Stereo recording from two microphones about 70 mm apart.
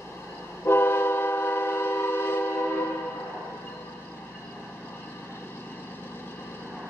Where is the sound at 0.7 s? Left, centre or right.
Left.